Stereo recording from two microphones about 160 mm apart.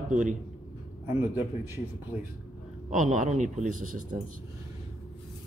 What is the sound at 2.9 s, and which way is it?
Speech, 50° right (ahead or behind).